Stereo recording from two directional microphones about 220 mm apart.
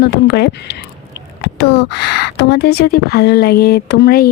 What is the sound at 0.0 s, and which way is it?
Speech, 50° left (ahead or behind).